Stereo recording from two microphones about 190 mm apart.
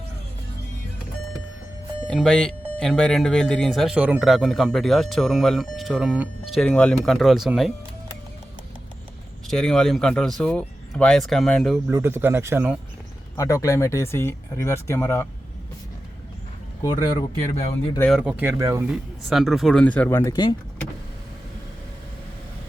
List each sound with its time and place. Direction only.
2.0 s speech: 5° left (ahead or behind)
9.5 s speech: 5° left (ahead or behind)
11.9 s speech: 10° right (ahead or behind)
13.3 s speech: 15° left (ahead or behind)
17.5 s speech: 35° left (ahead or behind)
18.1 s speech: 5° right (ahead or behind)
19.3 s speech: centre (ahead or behind); by 20.6 s 20° left (ahead or behind)